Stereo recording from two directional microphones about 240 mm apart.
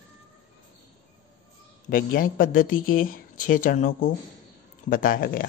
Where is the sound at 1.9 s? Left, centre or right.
Left.